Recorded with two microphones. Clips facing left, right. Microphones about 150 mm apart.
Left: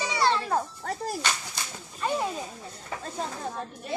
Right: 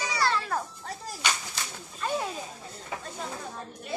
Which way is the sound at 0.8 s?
55° left (ahead or behind).